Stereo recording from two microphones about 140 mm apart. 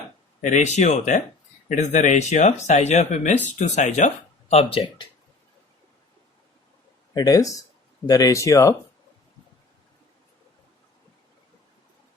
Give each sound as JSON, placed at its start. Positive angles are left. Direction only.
{"t": 0.4, "sound": "speech", "side_deg": 55}
{"t": 7.1, "sound": "speech", "side_deg": 25}